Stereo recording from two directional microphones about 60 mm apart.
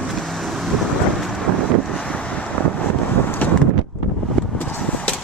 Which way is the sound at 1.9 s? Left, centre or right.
Centre.